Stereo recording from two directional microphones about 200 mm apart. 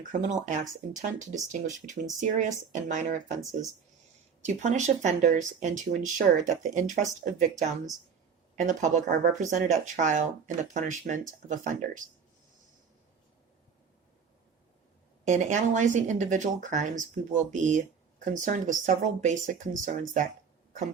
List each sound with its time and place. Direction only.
0.0 s speech: 40° right (ahead or behind)
4.4 s speech: 35° right (ahead or behind)
8.5 s speech: 40° right (ahead or behind)
15.3 s speech: 35° right (ahead or behind)